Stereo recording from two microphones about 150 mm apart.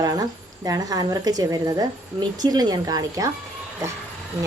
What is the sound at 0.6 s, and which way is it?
A woman's voice, 25° right (ahead or behind).